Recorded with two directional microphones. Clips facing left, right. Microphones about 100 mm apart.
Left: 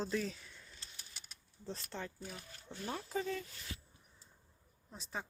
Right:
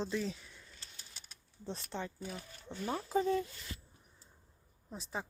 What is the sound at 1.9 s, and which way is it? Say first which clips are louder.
Speech: right 4 dB; 5° right (ahead or behind).